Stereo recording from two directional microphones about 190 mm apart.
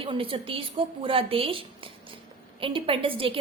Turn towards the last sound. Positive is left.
turn(degrees=-30)  # may be behind; listen again after turning